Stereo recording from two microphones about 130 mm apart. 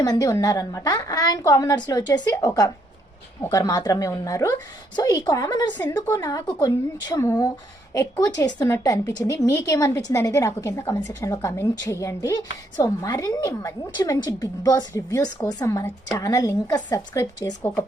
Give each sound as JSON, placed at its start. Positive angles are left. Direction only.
{"t": 0.0, "sound": "a woman's voice", "side_deg": 25}
{"t": 17.6, "sound": "speech", "side_deg": 15}